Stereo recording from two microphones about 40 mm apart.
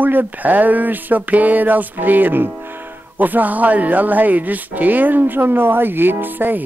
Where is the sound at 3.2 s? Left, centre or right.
Right.